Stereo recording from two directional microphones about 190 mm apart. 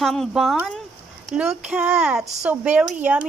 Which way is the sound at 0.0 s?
Centre (ahead or behind).